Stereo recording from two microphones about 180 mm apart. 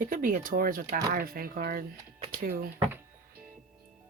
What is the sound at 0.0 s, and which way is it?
Speech, 50° right (ahead or behind).